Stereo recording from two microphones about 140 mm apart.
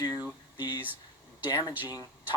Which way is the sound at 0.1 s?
10° right (ahead or behind).